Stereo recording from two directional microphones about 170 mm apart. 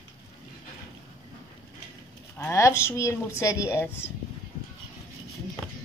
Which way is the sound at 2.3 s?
15° left (ahead or behind).